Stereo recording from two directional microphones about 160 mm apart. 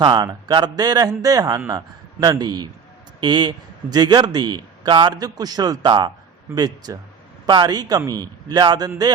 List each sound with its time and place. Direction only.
0.0 s speech: 25° right (ahead or behind)